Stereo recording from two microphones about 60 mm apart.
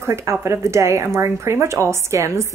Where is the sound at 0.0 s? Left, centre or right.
Right.